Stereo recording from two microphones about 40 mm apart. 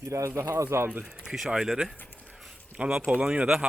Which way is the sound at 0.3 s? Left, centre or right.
Right.